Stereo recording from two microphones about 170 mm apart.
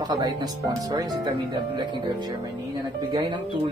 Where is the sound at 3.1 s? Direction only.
25° right (ahead or behind).